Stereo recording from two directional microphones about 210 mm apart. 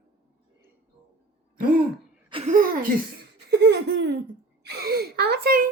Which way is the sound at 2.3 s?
35° right (ahead or behind).